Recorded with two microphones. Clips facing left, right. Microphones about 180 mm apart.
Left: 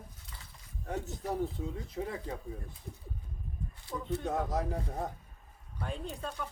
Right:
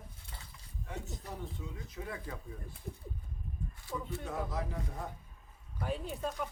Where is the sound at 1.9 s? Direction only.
25° left (ahead or behind).